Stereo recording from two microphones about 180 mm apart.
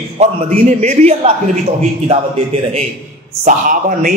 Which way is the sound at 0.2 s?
40° right (ahead or behind).